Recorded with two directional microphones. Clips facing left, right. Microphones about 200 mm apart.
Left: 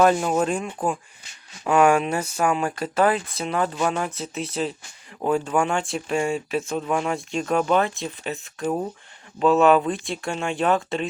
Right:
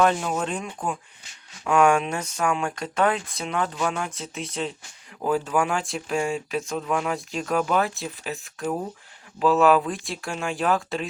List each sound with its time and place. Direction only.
0.0 s speech: 5° left (ahead or behind)